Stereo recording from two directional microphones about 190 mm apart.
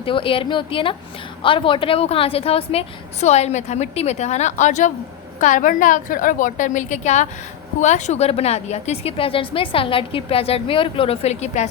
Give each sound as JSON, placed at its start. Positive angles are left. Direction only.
{"t": 0.0, "sound": "a woman's voice", "side_deg": 30}